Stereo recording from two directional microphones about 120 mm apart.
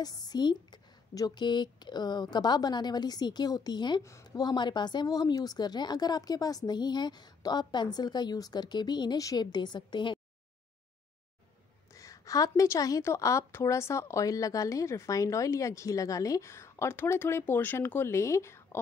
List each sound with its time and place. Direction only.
0.0 s speech: 35° left (ahead or behind)
4.0 s speech: 25° left (ahead or behind)
11.9 s a woman's voice: 25° left (ahead or behind)